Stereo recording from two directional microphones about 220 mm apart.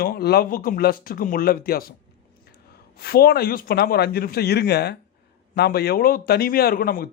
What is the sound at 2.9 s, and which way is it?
A man's voice, 45° left (ahead or behind).